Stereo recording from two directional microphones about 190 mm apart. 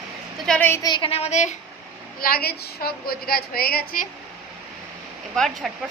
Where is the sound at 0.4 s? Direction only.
5° left (ahead or behind); by 1.5 s 40° left (ahead or behind).